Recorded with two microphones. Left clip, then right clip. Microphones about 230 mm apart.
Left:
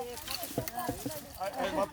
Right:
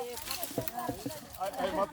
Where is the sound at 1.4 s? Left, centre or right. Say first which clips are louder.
Even; left.